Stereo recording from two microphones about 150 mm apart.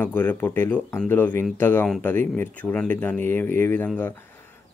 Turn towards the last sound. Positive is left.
turn(degrees=10)  # may be behind; listen again after turning